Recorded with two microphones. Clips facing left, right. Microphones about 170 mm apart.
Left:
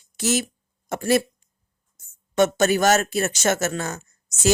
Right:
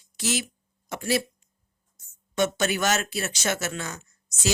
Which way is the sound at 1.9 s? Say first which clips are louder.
Left 6 dB; 50° left (ahead or behind).